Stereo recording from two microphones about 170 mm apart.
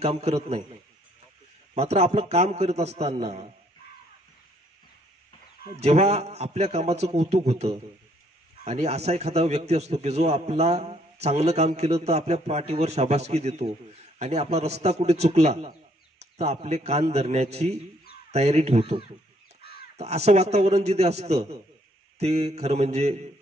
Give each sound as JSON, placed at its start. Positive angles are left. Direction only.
{"t": 0.0, "sound": "a man's voice", "side_deg": -40}
{"t": 1.8, "sound": "a man's voice", "side_deg": -40}
{"t": 5.8, "sound": "a man's voice", "side_deg": -40}